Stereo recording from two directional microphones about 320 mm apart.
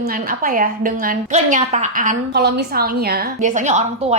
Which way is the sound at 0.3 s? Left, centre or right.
Right.